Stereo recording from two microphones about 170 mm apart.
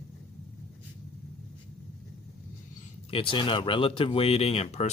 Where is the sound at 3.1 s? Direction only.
30° left (ahead or behind).